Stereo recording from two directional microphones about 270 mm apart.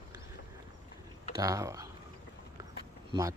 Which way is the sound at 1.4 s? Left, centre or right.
Centre.